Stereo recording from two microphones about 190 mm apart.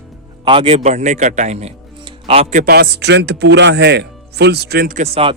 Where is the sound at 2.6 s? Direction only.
55° right (ahead or behind).